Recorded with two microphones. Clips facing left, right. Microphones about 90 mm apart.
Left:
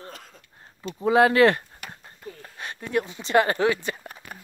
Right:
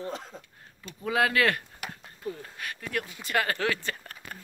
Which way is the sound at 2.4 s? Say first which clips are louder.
Left 2 dB; 25° left (ahead or behind).